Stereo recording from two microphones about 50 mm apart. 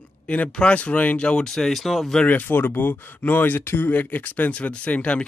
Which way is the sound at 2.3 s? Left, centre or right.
Left.